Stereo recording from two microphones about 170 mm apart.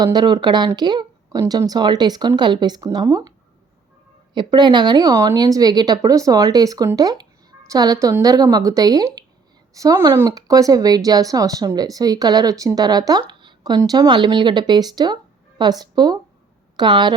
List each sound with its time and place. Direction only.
0.0 s speech: 25° right (ahead or behind)
4.4 s speech: 25° right (ahead or behind)